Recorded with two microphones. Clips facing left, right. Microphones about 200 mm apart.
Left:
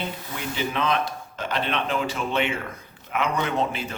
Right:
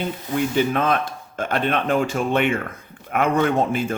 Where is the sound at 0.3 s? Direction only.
50° right (ahead or behind).